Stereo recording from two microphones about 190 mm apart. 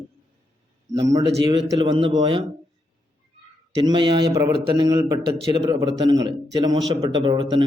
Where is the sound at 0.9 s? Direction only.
15° right (ahead or behind).